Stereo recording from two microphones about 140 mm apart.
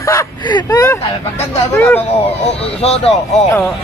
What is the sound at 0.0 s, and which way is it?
Speech, 20° left (ahead or behind).